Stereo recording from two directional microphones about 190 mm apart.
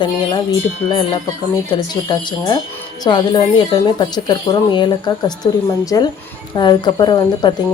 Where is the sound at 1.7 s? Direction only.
20° left (ahead or behind).